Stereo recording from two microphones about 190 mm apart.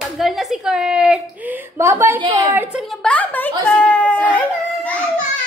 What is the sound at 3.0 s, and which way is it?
Speech, 5° left (ahead or behind).